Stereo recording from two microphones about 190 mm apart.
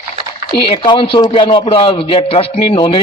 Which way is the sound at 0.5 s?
25° left (ahead or behind).